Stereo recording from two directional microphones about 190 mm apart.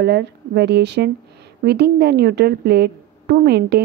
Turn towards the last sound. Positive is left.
turn(degrees=-60)  # may be behind; listen again after turning